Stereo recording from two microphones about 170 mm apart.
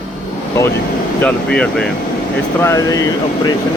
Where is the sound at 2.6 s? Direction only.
20° left (ahead or behind).